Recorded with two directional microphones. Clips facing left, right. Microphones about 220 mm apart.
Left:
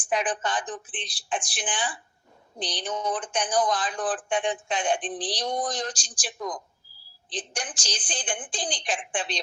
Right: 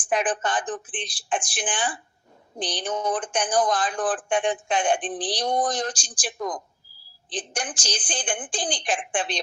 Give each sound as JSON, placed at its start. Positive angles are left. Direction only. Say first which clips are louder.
{"t": 0.1, "sound": "speech", "louder": "right 3 dB", "side_deg": -50}